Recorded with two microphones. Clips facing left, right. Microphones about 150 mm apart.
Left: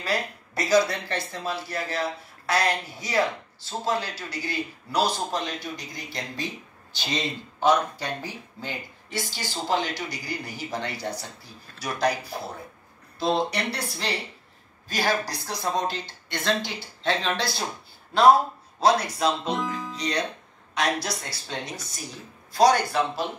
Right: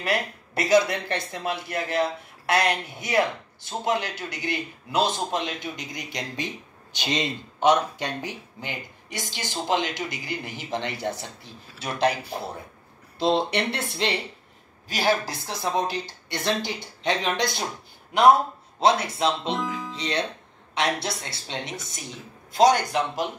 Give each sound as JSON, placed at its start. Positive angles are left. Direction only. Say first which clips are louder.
{"t": 0.1, "sound": "speech", "louder": "right 1 dB", "side_deg": -25}
{"t": 19.5, "sound": "music", "louder": "even", "side_deg": 0}
{"t": 20.0, "sound": "speech", "louder": "even", "side_deg": -25}